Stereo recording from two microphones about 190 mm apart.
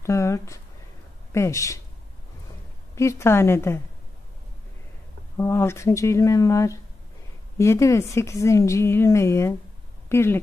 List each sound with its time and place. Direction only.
0.0 s a woman's voice: 15° left (ahead or behind)
3.0 s a woman's voice: 15° left (ahead or behind)
5.4 s a woman's voice: 15° left (ahead or behind)